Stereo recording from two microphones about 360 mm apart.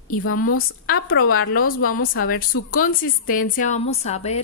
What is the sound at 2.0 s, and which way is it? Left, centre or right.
A woman's voice, left.